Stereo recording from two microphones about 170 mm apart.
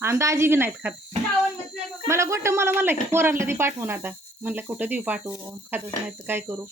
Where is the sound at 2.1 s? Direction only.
15° right (ahead or behind).